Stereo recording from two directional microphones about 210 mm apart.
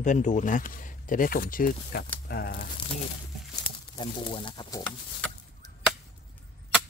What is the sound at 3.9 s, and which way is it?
Speech, 25° left (ahead or behind).